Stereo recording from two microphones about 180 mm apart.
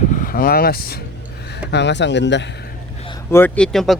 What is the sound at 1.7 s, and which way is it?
Speech, 75° left (ahead or behind).